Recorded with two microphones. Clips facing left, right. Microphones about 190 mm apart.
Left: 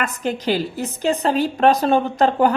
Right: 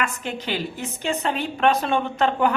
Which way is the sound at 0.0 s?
40° left (ahead or behind).